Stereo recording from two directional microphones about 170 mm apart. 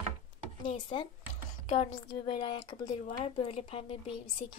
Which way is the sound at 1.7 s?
35° left (ahead or behind).